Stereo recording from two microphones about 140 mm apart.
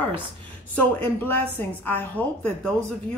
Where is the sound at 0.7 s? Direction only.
15° left (ahead or behind).